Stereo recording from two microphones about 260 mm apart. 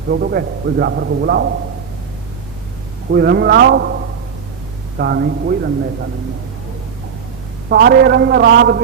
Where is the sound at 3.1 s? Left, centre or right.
Right.